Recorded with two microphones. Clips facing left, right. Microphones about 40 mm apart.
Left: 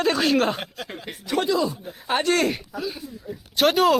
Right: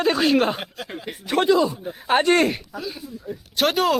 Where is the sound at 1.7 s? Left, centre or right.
Centre.